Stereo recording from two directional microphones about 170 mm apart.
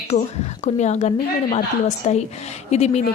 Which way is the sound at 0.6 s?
40° left (ahead or behind).